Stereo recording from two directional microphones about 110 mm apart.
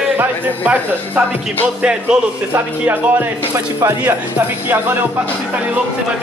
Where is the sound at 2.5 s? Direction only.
20° right (ahead or behind).